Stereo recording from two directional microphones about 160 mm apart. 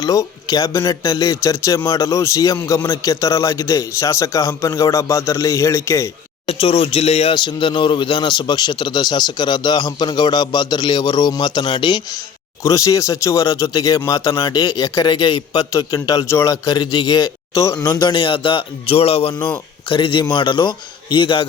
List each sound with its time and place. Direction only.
0.0 s a man's voice: 20° left (ahead or behind)
6.4 s speech: 35° left (ahead or behind)
7.3 s a man's voice: 30° left (ahead or behind)